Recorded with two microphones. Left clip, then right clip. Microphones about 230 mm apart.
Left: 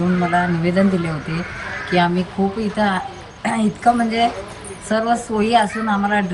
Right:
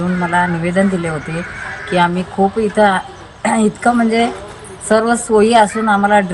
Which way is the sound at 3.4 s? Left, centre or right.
Right.